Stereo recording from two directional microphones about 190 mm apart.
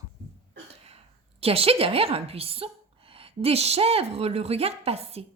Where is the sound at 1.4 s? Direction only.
30° right (ahead or behind).